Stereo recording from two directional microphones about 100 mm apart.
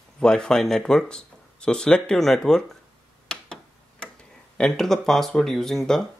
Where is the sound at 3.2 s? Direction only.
5° left (ahead or behind).